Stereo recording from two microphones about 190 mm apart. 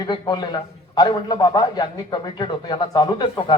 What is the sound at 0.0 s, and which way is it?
A man's voice, 20° left (ahead or behind).